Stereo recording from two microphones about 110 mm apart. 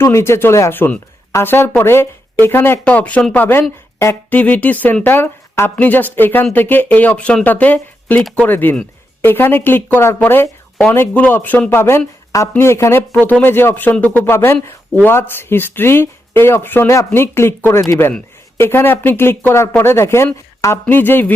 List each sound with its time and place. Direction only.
0.0 s speech: 25° left (ahead or behind)